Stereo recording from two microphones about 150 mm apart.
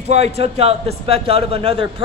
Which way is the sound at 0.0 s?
45° right (ahead or behind).